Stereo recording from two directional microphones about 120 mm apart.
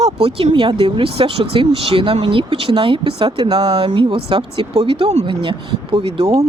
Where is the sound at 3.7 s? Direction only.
45° right (ahead or behind); by 5.3 s 65° right (ahead or behind).